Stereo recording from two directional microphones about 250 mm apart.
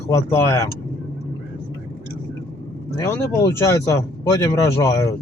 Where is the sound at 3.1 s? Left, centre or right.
Centre.